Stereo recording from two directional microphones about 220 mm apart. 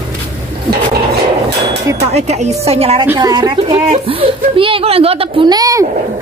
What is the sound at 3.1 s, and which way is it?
A woman's voice, 15° right (ahead or behind).